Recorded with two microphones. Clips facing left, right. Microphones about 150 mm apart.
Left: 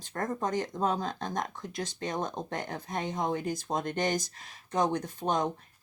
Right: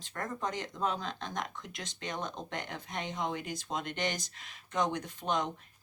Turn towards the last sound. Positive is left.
turn(degrees=40)  # may be behind; listen again after turning